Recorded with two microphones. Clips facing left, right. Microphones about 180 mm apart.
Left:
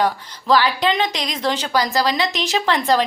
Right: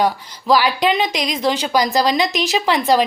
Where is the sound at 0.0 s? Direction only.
10° right (ahead or behind).